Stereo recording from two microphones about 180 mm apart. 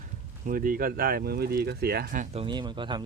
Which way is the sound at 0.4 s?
50° right (ahead or behind).